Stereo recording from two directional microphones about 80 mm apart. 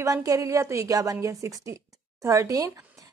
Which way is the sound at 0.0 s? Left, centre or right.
Right.